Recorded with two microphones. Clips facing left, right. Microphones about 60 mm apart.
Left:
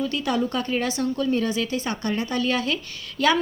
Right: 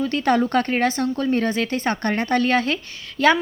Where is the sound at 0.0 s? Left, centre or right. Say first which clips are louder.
Right 5 dB; right.